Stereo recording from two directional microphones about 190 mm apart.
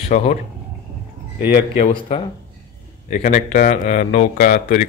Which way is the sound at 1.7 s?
35° left (ahead or behind).